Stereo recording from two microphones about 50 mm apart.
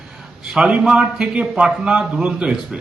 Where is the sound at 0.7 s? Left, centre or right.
Centre.